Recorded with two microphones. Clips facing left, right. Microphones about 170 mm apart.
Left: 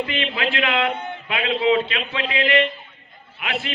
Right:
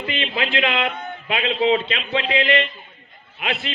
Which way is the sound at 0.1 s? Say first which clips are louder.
Even; 20° right (ahead or behind).